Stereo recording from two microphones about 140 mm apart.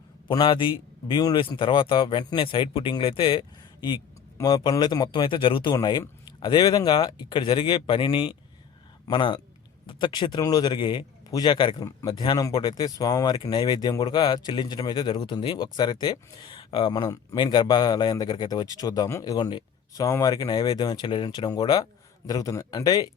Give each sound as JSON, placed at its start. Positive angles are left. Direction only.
{"t": 0.3, "sound": "a man's voice", "side_deg": 35}